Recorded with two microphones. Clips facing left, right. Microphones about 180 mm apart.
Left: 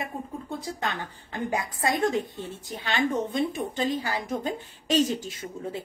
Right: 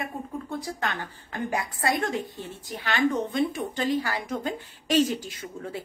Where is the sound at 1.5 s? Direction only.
20° left (ahead or behind).